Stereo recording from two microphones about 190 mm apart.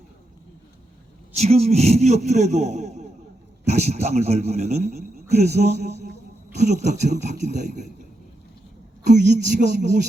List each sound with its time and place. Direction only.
1.4 s a man's voice: 35° right (ahead or behind)
9.0 s a man's voice: 40° right (ahead or behind)